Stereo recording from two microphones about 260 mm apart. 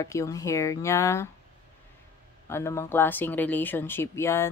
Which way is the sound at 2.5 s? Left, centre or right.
Centre.